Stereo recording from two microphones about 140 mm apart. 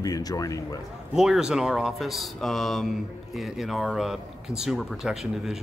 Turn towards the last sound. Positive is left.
turn(degrees=-5)  # may be behind; listen again after turning